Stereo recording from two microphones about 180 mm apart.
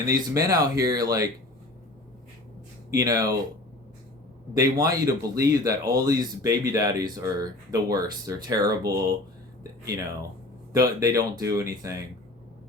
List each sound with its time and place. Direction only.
0.1 s speech: 20° right (ahead or behind)
2.9 s speech: 20° right (ahead or behind)
4.5 s speech: 20° right (ahead or behind)
10.7 s speech: 20° right (ahead or behind)